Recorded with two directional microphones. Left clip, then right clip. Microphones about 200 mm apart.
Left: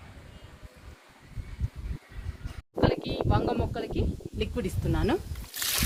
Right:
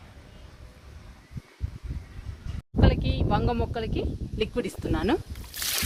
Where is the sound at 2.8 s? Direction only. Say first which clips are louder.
Left 1 dB; 40° right (ahead or behind).